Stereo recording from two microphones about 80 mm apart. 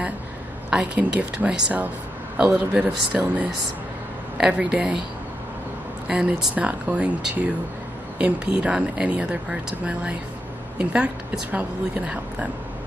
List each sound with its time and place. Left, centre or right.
0.7 s speech: centre
6.0 s speech: centre